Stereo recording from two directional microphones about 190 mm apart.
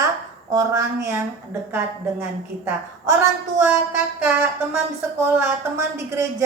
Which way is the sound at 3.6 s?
10° right (ahead or behind).